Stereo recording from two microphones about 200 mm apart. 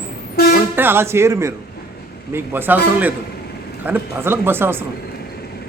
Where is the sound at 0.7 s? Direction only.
10° right (ahead or behind).